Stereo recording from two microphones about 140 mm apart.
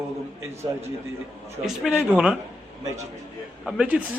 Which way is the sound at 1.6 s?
5° right (ahead or behind).